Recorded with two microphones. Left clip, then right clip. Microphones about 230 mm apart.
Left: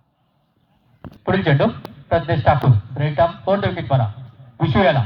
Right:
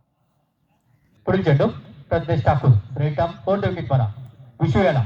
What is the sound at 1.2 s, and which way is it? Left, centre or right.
A man's voice, right.